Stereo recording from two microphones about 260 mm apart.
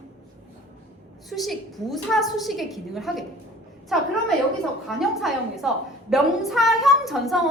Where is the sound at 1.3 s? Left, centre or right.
Centre.